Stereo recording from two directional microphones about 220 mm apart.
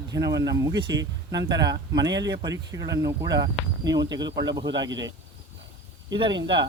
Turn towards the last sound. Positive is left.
turn(degrees=-20)  # may be behind; listen again after turning